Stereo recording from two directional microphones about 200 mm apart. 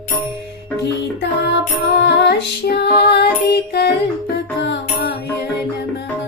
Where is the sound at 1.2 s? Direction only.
60° left (ahead or behind).